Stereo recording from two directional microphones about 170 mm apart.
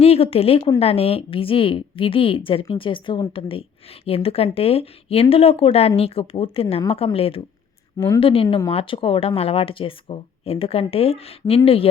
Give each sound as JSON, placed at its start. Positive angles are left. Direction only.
{"t": 0.0, "sound": "a woman's voice", "side_deg": 35}